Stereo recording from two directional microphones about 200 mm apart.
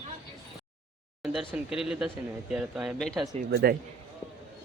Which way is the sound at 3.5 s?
50° right (ahead or behind).